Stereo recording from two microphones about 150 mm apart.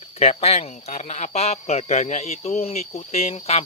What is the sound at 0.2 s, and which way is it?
Speech, 45° left (ahead or behind).